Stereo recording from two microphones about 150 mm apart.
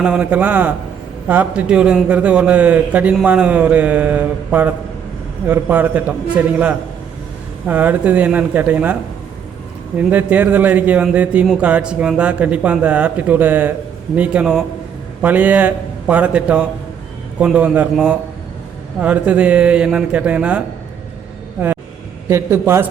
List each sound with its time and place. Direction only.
0.0 s a man's voice: 10° right (ahead or behind)
10.0 s a man's voice: 10° right (ahead or behind)
22.3 s a man's voice: 15° right (ahead or behind)